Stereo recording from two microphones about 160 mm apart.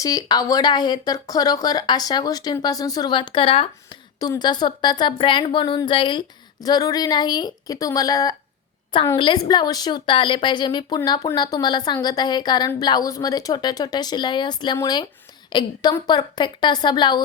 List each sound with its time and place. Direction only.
0.0 s a woman's voice: 20° left (ahead or behind)